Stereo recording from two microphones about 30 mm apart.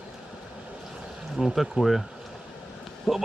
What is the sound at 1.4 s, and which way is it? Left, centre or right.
Speech, centre.